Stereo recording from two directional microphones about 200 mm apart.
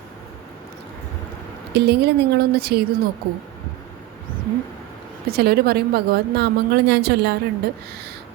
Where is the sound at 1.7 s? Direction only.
55° right (ahead or behind).